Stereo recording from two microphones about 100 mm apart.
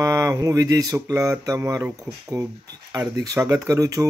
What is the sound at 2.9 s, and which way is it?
Speech, 35° right (ahead or behind).